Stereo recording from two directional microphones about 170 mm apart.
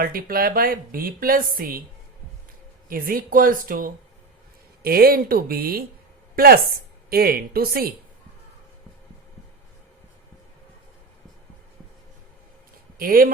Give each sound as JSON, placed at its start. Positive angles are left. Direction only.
{"t": 0.0, "sound": "a woman's voice", "side_deg": -60}
{"t": 2.9, "sound": "a woman's voice", "side_deg": -55}
{"t": 13.0, "sound": "a woman's voice", "side_deg": -55}